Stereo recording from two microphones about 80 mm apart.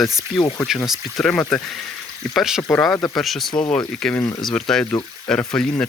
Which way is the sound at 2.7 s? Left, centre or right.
Centre.